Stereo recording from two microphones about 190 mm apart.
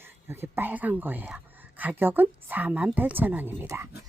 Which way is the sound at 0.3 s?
10° right (ahead or behind).